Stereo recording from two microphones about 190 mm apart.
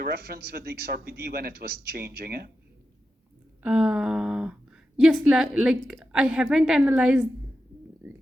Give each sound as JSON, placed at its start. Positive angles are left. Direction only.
{"t": 0.0, "sound": "a man's voice", "side_deg": -55}
{"t": 3.6, "sound": "a sound", "side_deg": -5}
{"t": 4.9, "sound": "a woman's voice", "side_deg": 0}